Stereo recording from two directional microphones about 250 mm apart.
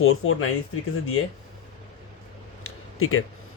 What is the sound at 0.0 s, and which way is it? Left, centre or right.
Speech, left.